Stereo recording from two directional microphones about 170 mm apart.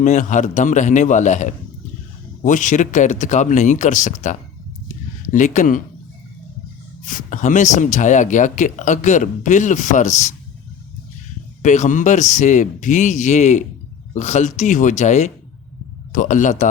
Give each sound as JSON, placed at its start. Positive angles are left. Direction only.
{"t": 0.0, "sound": "speech", "side_deg": 45}
{"t": 4.9, "sound": "a sound", "side_deg": 50}
{"t": 7.0, "sound": "speech", "side_deg": 50}
{"t": 11.6, "sound": "speech", "side_deg": 45}